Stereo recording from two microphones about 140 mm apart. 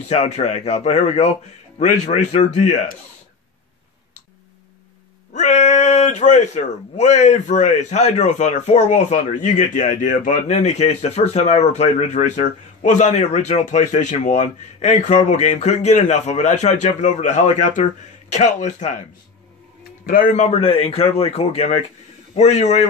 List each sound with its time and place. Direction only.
0.1 s a man's voice: 50° left (ahead or behind)
5.3 s speech: 55° left (ahead or behind)
20.1 s a man's voice: 80° left
20.3 s a man's voice: 50° left (ahead or behind)